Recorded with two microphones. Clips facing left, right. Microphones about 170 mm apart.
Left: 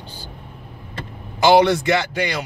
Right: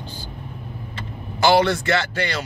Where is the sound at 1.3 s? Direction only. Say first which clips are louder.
Left 3 dB; 20° left (ahead or behind).